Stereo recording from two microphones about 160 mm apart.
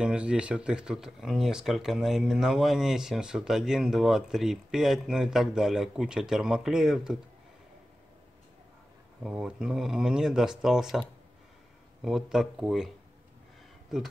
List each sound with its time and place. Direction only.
0.0 s speech: 5° right (ahead or behind)
9.2 s speech: 5° right (ahead or behind)